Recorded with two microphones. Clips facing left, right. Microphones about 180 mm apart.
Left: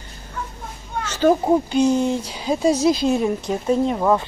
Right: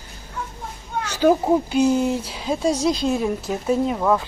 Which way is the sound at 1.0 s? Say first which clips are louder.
Even; 10° right (ahead or behind).